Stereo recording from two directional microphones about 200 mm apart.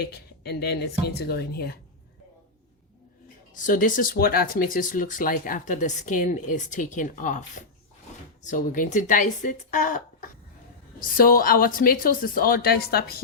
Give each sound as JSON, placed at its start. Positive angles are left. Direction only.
{"t": 0.0, "sound": "a woman's voice", "side_deg": 55}
{"t": 3.5, "sound": "speech", "side_deg": 40}
{"t": 8.4, "sound": "a woman's voice", "side_deg": 40}